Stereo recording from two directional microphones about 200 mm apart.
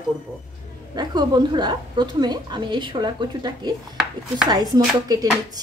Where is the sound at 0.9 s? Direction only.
20° right (ahead or behind).